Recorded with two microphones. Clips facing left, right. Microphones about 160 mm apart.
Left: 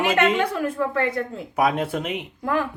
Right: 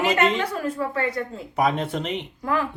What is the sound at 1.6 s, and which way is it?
Speech, 5° left (ahead or behind).